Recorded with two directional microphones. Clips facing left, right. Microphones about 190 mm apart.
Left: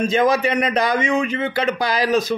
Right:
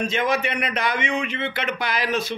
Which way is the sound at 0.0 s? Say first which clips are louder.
Left 6 dB; 40° left (ahead or behind).